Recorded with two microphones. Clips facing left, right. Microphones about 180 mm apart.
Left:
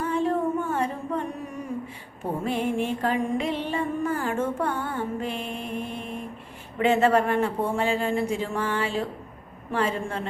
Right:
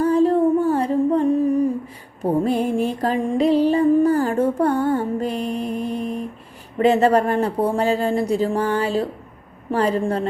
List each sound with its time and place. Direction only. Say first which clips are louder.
0.0 s music: right 9 dB; 35° right (ahead or behind)